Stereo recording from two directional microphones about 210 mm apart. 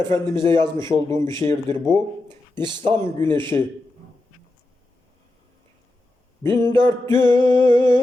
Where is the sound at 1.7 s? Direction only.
20° right (ahead or behind).